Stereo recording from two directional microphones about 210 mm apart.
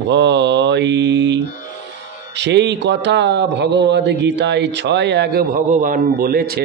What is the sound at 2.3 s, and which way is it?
A man's voice, 55° right (ahead or behind).